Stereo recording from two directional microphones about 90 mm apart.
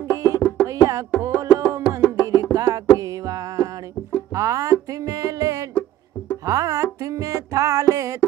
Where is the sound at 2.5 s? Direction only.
40° right (ahead or behind).